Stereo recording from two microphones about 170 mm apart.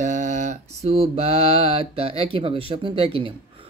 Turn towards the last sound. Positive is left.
turn(degrees=-30)  # may be behind; listen again after turning